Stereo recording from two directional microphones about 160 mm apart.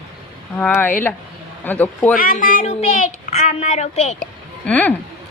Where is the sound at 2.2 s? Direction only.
60° left (ahead or behind); by 4.1 s 45° left (ahead or behind).